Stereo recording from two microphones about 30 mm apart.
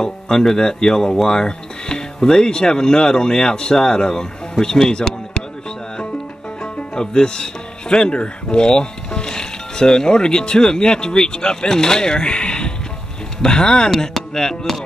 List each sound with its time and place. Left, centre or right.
0.0 s speech: centre
7.0 s speech: left